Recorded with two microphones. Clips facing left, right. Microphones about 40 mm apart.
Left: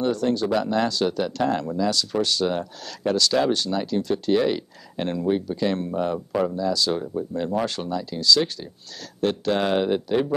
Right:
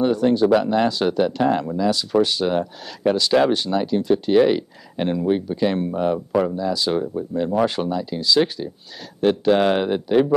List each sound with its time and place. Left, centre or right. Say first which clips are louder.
0.0 s speech: right 5 dB; centre